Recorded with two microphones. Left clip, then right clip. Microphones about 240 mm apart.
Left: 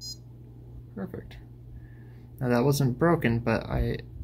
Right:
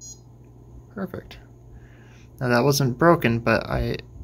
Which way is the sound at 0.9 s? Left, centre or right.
Centre.